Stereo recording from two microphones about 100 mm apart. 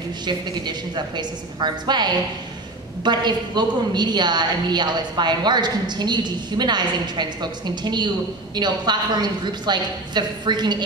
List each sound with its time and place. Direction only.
0.2 s a woman's voice: 45° right (ahead or behind)